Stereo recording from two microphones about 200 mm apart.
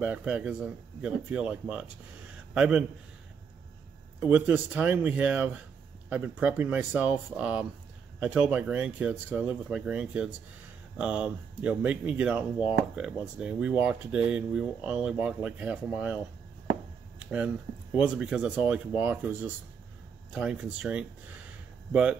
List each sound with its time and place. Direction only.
0.0 s a man's voice: 5° right (ahead or behind)
4.2 s speech: 5° right (ahead or behind)
17.2 s a sound: 5° right (ahead or behind)
17.9 s speech: 5° right (ahead or behind)